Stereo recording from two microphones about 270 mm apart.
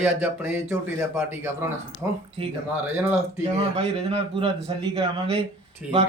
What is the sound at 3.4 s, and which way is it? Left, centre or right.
Speech, right.